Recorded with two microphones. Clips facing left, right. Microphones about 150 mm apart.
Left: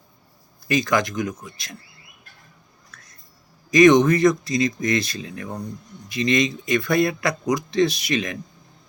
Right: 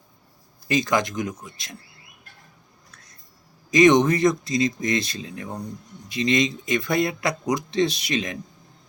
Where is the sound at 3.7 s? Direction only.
25° right (ahead or behind).